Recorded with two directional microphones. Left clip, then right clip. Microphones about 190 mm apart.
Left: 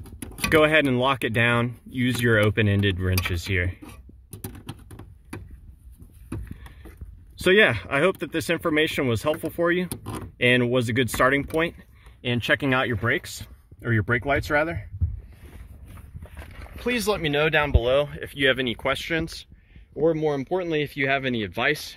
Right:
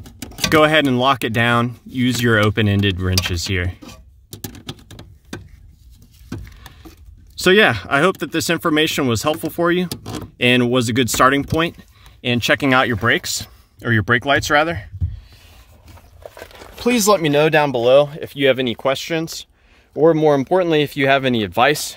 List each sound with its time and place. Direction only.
0.5 s speech: 40° right (ahead or behind)
7.4 s speech: 45° right (ahead or behind)
16.9 s speech: 40° right (ahead or behind); by 19.4 s 20° right (ahead or behind)
20.0 s speech: 40° right (ahead or behind)